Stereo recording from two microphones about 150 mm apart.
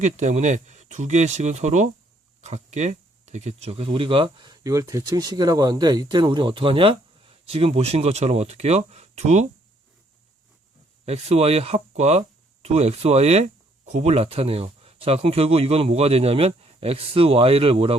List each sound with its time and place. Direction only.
0.0 s speech: 50° right (ahead or behind)
11.0 s speech: 45° right (ahead or behind)